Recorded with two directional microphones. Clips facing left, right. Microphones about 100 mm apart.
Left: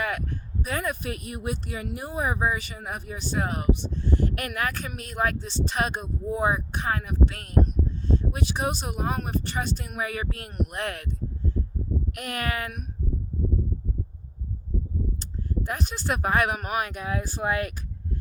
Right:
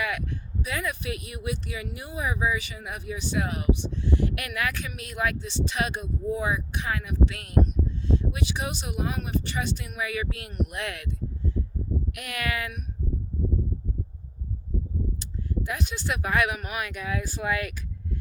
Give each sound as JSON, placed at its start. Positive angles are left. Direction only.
{"t": 0.0, "sound": "speech", "side_deg": 40}
{"t": 15.2, "sound": "speech", "side_deg": 40}